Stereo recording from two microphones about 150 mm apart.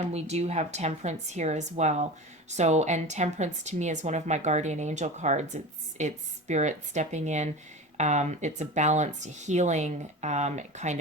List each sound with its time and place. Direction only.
0.1 s speech: 45° right (ahead or behind)